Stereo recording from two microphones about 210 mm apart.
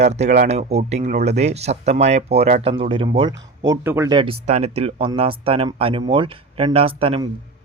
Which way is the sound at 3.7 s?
10° right (ahead or behind).